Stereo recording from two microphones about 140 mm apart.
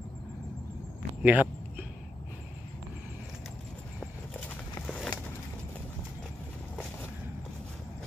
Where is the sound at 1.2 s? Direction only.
10° right (ahead or behind).